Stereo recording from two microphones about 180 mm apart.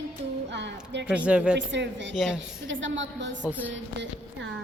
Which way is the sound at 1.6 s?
80° right.